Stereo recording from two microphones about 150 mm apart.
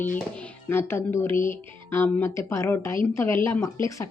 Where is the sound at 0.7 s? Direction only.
15° left (ahead or behind).